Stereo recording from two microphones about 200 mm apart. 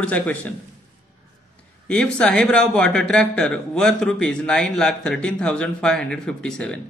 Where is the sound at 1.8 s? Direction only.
5° left (ahead or behind).